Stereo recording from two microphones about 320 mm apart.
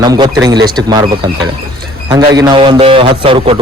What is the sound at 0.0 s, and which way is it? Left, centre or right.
Speech, centre.